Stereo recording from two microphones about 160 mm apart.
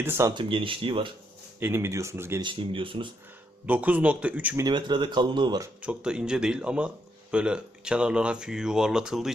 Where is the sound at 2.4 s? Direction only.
35° right (ahead or behind).